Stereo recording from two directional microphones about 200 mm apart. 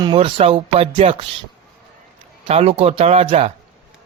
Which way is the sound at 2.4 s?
30° right (ahead or behind).